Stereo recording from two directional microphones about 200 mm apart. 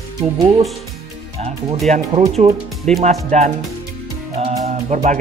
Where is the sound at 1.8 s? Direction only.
35° right (ahead or behind).